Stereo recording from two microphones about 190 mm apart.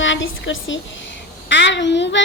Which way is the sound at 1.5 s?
70° left (ahead or behind).